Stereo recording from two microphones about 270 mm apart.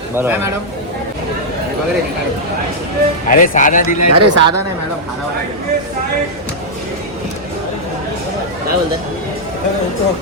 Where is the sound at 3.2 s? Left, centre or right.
Left.